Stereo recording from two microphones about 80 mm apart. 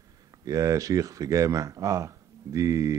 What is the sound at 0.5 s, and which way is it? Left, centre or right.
A man's voice, right.